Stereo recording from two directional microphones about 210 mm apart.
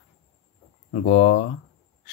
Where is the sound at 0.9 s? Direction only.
45° left (ahead or behind).